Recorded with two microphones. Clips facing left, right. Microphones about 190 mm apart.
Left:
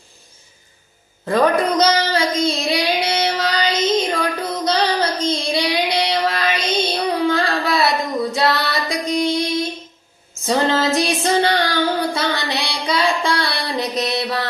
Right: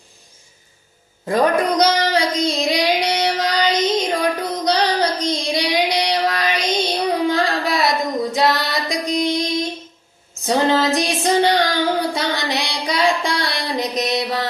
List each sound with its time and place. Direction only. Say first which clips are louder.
1.2 s child singing: left 1 dB; 10° right (ahead or behind)
7.3 s singing: even; 15° right (ahead or behind)
10.4 s a sound: right 1 dB; 15° right (ahead or behind)
12.1 s child singing: even; 15° right (ahead or behind)